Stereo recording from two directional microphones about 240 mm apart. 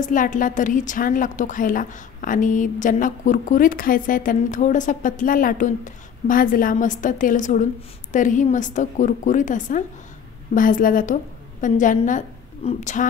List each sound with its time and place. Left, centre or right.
0.0 s a woman's voice: left